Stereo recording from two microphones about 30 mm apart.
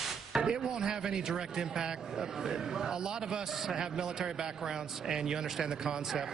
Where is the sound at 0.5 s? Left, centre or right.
Right.